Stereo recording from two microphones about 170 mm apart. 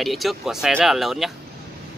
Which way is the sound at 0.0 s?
Centre (ahead or behind).